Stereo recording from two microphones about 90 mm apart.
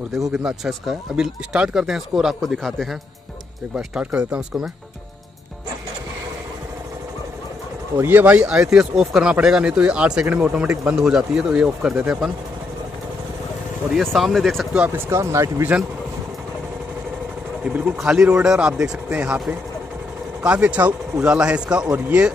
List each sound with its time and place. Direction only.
0.3 s speech: 10° right (ahead or behind)
3.7 s speech: 10° right (ahead or behind)
8.0 s speech: 20° right (ahead or behind)
13.9 s speech: centre (ahead or behind)
14.9 s speech: 25° right (ahead or behind)
17.7 s speech: 10° right (ahead or behind)
20.4 s speech: 15° right (ahead or behind)